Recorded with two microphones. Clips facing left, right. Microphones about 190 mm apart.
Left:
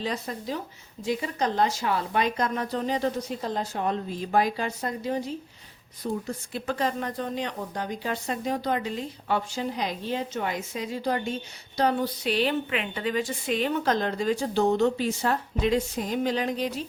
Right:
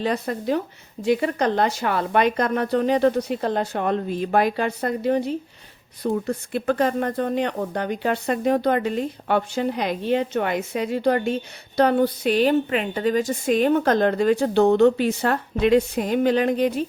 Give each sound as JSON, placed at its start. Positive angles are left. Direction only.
{"t": 0.0, "sound": "speech", "side_deg": -60}